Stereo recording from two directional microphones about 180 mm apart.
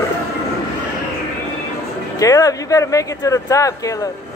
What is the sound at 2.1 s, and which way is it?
Speech, 20° left (ahead or behind).